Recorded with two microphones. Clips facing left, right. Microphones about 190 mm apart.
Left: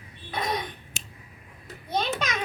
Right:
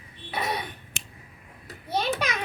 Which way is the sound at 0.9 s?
65° right (ahead or behind).